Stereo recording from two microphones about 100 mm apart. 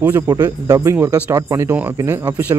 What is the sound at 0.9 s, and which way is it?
Speech, 15° right (ahead or behind).